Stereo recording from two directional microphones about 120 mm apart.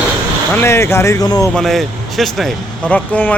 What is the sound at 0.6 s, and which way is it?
Speech, 20° left (ahead or behind).